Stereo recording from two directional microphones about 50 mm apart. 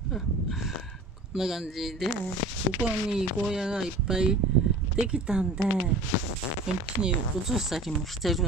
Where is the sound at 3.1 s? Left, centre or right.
Centre.